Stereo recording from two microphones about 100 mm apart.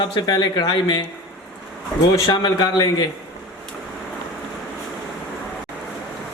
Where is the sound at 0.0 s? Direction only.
45° left (ahead or behind).